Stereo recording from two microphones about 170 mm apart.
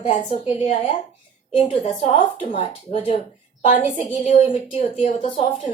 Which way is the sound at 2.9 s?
35° left (ahead or behind).